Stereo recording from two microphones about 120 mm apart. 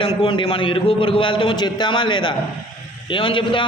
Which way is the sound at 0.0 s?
50° left (ahead or behind).